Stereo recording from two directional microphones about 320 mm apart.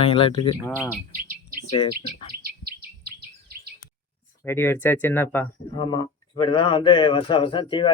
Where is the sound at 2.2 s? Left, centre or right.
Right.